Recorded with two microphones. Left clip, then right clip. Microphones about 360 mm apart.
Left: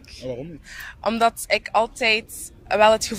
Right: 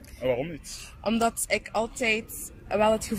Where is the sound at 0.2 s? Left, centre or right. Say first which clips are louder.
Right 5 dB; right.